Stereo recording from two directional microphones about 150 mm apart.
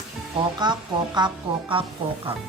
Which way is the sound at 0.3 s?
30° right (ahead or behind).